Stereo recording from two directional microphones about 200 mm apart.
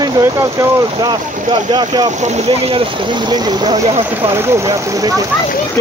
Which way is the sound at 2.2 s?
35° right (ahead or behind).